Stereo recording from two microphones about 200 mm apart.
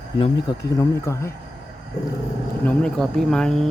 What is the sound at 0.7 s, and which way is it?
Speech, 15° left (ahead or behind).